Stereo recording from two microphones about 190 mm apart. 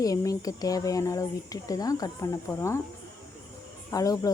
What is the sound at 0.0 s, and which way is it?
Speech, 20° left (ahead or behind).